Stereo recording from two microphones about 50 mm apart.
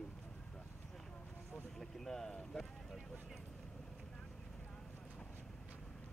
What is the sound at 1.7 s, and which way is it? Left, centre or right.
Boat, centre.